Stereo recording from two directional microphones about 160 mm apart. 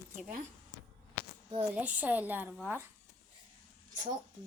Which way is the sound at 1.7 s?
10° right (ahead or behind).